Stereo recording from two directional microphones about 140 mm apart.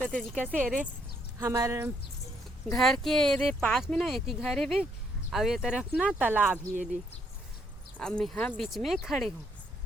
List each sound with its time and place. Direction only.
0.0 s speech: 10° left (ahead or behind)
0.3 s speech: 10° right (ahead or behind)
1.4 s speech: 20° right (ahead or behind)
2.7 s speech: centre (ahead or behind)
7.9 s speech: 5° left (ahead or behind)